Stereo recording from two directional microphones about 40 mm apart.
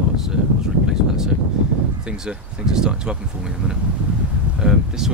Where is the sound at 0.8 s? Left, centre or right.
Centre.